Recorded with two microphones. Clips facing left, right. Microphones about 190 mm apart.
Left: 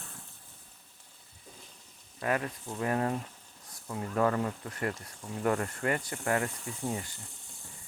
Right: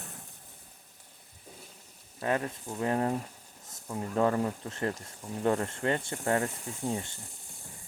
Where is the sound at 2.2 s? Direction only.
25° right (ahead or behind).